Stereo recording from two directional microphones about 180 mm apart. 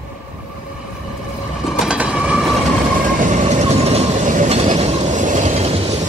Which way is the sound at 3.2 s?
40° right (ahead or behind).